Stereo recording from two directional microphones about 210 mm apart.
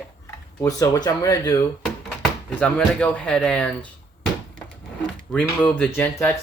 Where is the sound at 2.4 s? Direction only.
5° left (ahead or behind).